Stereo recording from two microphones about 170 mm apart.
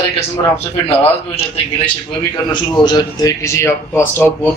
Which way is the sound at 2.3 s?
25° left (ahead or behind).